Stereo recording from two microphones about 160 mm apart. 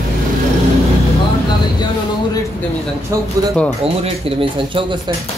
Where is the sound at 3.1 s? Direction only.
20° right (ahead or behind).